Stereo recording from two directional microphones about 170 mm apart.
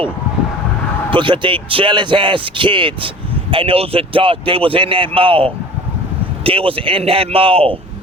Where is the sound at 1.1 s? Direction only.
30° right (ahead or behind).